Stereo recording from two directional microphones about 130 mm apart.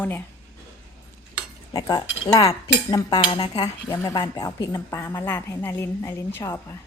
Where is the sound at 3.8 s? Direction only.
20° left (ahead or behind).